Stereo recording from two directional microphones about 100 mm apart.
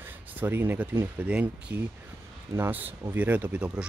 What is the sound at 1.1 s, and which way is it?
Speech, 15° right (ahead or behind).